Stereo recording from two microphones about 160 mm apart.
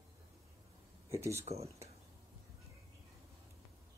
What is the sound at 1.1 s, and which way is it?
Speech, 15° right (ahead or behind).